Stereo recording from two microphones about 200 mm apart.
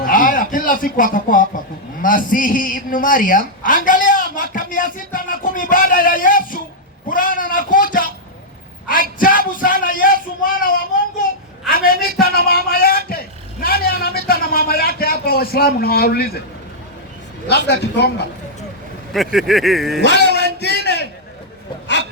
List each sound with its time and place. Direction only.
0.0 s speech: 40° left (ahead or behind)
3.8 s music: 40° left (ahead or behind)
7.1 s a sound: 45° left (ahead or behind)
17.7 s a man's voice: 55° left (ahead or behind)
19.1 s speech: centre (ahead or behind)
20.0 s a sound: 60° left (ahead or behind)